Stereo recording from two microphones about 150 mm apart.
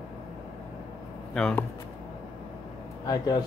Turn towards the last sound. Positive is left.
turn(degrees=25)  # may be behind; listen again after turning